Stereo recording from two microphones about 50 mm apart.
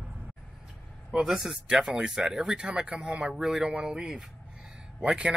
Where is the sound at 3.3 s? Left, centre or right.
Centre.